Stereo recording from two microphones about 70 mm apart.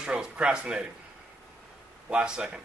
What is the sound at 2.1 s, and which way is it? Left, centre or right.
Speech, centre.